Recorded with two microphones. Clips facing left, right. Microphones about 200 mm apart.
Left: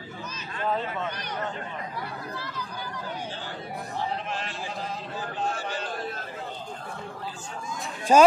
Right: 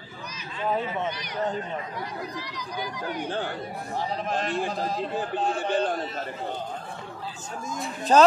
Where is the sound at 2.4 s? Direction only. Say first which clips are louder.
Right 3 dB; 15° right (ahead or behind).